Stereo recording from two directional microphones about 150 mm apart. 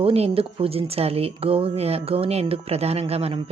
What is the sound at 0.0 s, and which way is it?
Speech, 40° right (ahead or behind).